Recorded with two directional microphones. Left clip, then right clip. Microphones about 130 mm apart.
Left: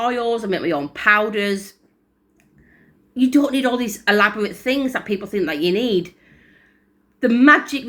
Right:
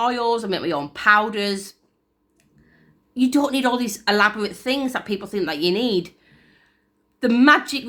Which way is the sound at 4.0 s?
35° right (ahead or behind).